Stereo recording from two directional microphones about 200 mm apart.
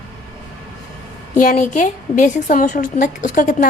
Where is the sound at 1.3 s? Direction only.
40° left (ahead or behind).